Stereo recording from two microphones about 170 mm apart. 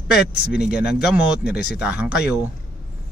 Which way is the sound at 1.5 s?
65° left (ahead or behind).